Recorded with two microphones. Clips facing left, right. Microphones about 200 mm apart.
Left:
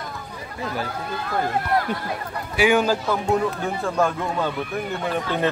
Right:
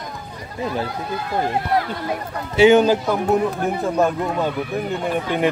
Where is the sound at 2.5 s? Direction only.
25° right (ahead or behind).